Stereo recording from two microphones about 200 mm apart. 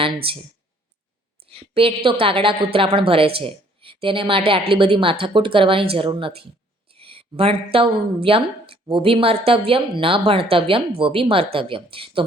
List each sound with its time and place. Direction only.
0.0 s a woman's voice: 25° right (ahead or behind)
1.5 s a sound: 25° right (ahead or behind)
2.0 s a woman's voice: 25° right (ahead or behind)